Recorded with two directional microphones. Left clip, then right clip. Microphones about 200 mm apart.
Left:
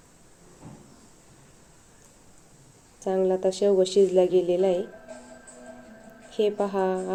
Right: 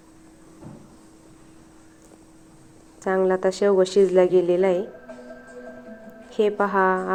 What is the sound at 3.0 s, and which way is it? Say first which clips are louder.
A woman's voice: right 3 dB; centre (ahead or behind).